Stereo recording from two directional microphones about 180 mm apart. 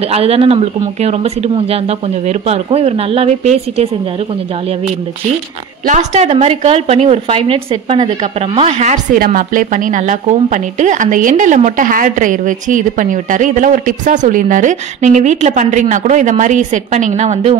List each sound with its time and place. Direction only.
0.0 s speech: 35° right (ahead or behind)
5.9 s a woman's voice: 40° right (ahead or behind)